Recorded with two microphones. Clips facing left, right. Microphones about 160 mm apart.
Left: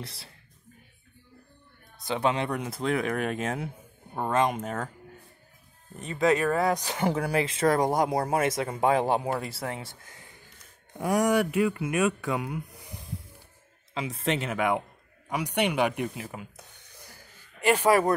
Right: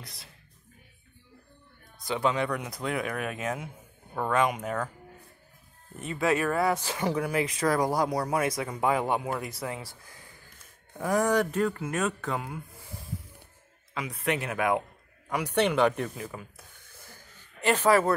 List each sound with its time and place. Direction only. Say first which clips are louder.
0.0 s speech: left 7 dB; 30° left (ahead or behind)
2.0 s speech: even; 25° left (ahead or behind)
3.3 s speech: left 3 dB; 35° left (ahead or behind)
6.1 s speech: left 2 dB; 20° left (ahead or behind)
7.0 s speech: left 1 dB; 30° left (ahead or behind)
11.0 s speech: left 1 dB; 15° left (ahead or behind)
12.5 s a sound: left 4 dB; 15° left (ahead or behind)
13.9 s speech: left 1 dB; 25° left (ahead or behind)